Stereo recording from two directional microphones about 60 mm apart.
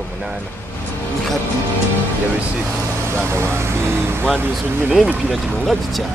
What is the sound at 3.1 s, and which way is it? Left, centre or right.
Speech, right.